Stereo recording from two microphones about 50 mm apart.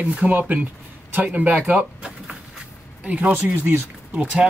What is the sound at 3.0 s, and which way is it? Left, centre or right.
Speech, right.